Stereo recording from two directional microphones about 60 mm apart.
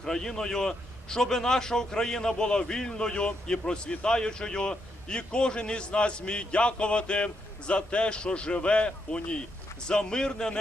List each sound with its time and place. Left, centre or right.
0.0 s a man's voice: centre